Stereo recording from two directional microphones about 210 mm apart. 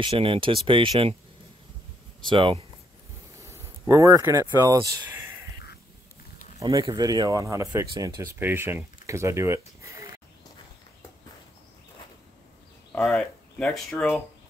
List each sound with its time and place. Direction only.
0.0 s speech: 25° right (ahead or behind)
2.2 s speech: 25° right (ahead or behind)
3.3 s speech: 10° right (ahead or behind)
6.6 s speech: 20° right (ahead or behind)
12.9 s speech: 5° left (ahead or behind)